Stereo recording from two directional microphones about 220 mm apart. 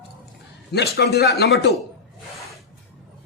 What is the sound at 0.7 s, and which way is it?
A man's voice, 45° left (ahead or behind).